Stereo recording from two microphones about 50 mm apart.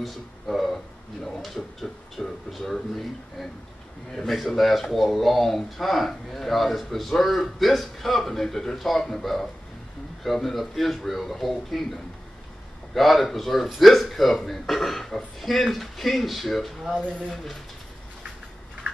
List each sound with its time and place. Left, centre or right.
0.0 s a sound: centre
1.4 s speech: centre
12.9 s speech: centre